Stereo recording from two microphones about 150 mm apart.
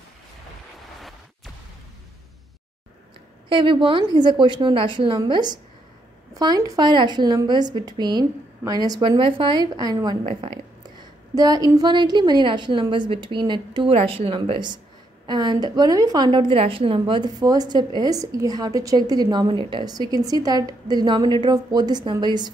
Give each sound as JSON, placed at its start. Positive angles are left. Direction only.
{"t": 3.4, "sound": "a woman's voice", "side_deg": -35}
{"t": 11.3, "sound": "a woman's voice", "side_deg": -25}